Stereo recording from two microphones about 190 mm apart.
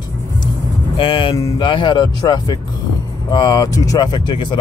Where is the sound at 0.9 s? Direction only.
25° left (ahead or behind).